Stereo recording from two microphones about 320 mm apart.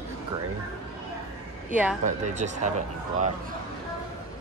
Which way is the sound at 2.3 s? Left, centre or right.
Right.